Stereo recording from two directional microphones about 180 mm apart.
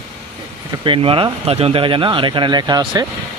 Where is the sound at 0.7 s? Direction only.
30° right (ahead or behind).